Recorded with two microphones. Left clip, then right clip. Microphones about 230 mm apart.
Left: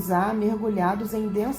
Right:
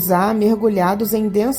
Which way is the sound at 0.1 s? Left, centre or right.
Right.